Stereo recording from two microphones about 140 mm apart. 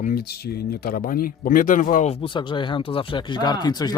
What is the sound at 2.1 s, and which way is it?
Speech, 40° left (ahead or behind).